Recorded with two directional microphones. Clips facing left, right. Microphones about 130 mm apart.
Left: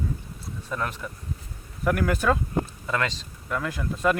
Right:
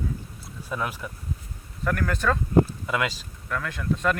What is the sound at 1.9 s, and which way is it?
Speech, 10° left (ahead or behind).